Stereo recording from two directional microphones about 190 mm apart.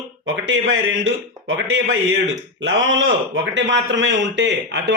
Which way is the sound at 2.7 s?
80° right.